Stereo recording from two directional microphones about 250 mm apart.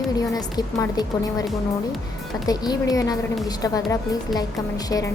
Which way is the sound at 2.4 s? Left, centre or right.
Centre.